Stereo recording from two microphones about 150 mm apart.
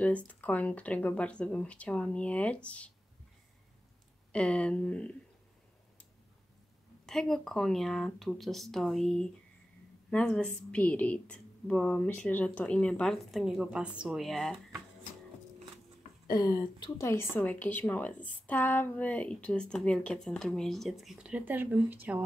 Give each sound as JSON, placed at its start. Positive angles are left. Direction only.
{"t": 0.0, "sound": "a woman's voice", "side_deg": 10}
{"t": 4.3, "sound": "a woman's voice", "side_deg": 5}
{"t": 7.1, "sound": "a woman's voice", "side_deg": 5}
{"t": 16.3, "sound": "speech", "side_deg": 30}
{"t": 17.1, "sound": "a woman's voice", "side_deg": 15}